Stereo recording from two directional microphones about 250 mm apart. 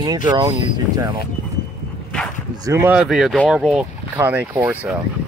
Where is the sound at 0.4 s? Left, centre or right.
Centre.